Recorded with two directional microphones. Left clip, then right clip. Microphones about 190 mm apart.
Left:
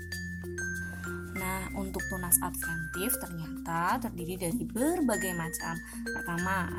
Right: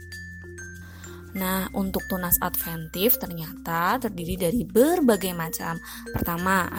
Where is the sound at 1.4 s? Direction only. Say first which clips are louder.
Right 9 dB; 45° right (ahead or behind).